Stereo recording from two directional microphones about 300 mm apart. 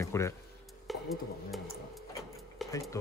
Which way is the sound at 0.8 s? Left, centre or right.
Centre.